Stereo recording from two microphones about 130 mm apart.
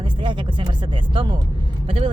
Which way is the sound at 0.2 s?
35° right (ahead or behind).